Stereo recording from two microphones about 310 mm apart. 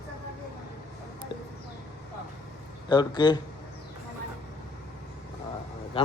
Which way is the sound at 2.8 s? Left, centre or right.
Centre.